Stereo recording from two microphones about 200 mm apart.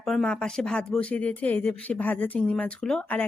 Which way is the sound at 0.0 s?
Centre (ahead or behind).